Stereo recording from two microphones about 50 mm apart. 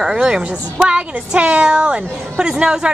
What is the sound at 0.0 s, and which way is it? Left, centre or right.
A woman's voice, centre.